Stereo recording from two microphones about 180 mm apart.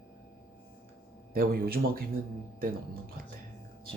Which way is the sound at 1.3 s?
55° right (ahead or behind).